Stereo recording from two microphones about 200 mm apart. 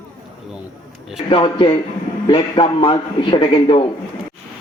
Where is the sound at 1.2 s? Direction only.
25° left (ahead or behind).